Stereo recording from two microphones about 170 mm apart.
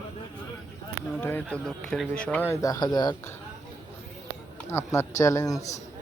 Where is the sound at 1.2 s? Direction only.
10° left (ahead or behind).